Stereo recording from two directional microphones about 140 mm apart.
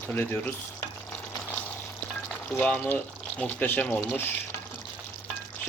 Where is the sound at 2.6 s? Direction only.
10° left (ahead or behind).